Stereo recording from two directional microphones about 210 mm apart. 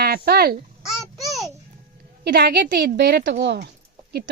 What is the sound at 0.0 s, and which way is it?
Speech, 45° right (ahead or behind).